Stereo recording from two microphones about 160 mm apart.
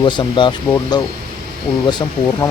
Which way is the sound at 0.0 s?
30° left (ahead or behind).